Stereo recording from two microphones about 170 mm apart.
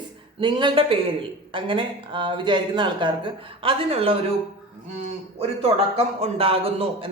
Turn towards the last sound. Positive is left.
turn(degrees=-35)  # may be behind; listen again after turning